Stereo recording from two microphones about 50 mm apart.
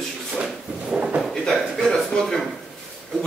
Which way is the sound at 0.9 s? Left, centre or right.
Right.